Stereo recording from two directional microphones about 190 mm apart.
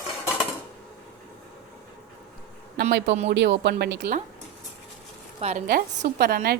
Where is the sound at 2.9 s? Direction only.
70° right (ahead or behind).